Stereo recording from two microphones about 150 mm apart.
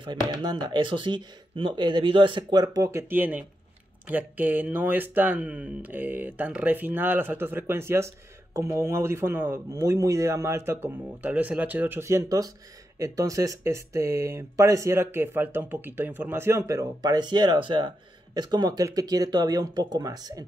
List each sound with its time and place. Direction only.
0.4 s speech: 30° right (ahead or behind)